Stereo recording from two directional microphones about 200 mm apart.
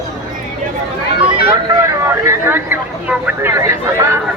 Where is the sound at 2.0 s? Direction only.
15° right (ahead or behind).